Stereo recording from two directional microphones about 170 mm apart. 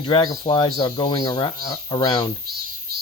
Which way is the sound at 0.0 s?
25° left (ahead or behind).